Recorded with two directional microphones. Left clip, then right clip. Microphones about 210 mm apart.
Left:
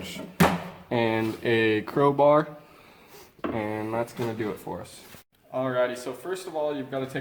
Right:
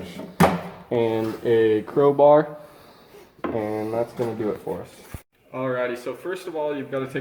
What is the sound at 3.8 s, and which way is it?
Speech, 40° left (ahead or behind).